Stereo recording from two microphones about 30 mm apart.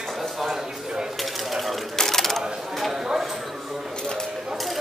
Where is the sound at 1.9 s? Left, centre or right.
Centre.